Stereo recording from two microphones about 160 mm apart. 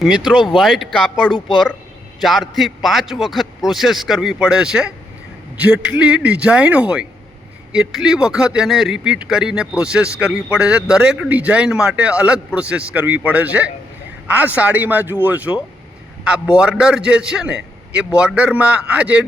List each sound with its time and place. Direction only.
0.3 s a man's voice: centre (ahead or behind)